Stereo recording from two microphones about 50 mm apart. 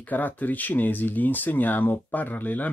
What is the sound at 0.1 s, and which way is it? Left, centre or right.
Speech, left.